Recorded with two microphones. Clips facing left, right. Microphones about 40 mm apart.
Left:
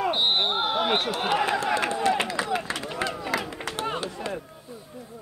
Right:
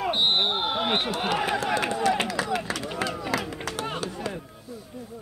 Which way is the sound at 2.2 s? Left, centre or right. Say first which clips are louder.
Even; left.